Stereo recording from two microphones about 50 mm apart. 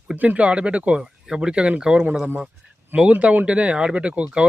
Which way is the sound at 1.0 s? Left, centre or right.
Centre.